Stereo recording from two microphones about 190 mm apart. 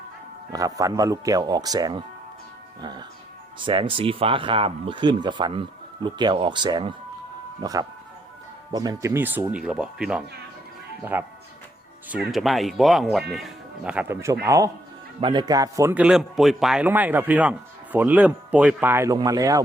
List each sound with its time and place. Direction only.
0.5 s speech: 20° right (ahead or behind)
3.6 s a man's voice: 25° right (ahead or behind)